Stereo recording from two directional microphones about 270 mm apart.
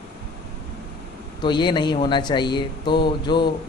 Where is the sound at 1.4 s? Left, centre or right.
Centre.